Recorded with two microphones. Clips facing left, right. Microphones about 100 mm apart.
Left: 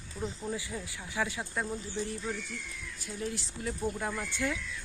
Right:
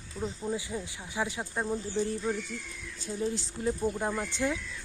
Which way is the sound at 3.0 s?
25° right (ahead or behind).